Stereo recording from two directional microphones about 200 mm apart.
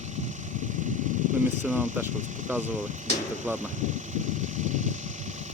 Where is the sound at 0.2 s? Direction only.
40° right (ahead or behind).